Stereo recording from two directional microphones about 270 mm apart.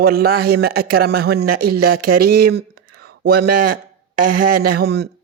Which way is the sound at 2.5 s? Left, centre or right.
Right.